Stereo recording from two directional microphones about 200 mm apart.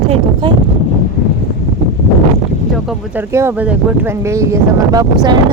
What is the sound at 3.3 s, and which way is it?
Speech, 10° right (ahead or behind).